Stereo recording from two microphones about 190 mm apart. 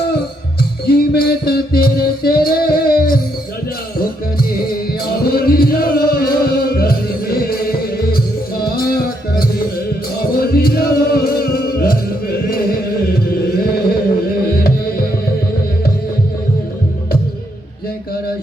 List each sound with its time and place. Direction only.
0.9 s music: 55° left (ahead or behind)